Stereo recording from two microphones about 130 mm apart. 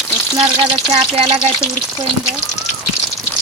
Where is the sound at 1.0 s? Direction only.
55° right (ahead or behind).